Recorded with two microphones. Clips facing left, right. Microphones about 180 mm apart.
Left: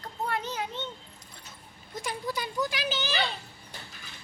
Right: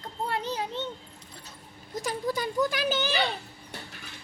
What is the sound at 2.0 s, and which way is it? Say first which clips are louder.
Speech: right 4 dB; 45° right (ahead or behind).